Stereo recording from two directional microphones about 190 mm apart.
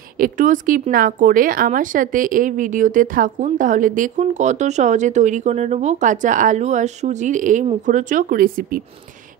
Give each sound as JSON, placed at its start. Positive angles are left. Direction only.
{"t": 0.2, "sound": "speech", "side_deg": -45}